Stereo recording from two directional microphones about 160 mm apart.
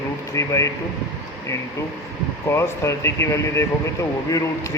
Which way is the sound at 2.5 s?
15° left (ahead or behind).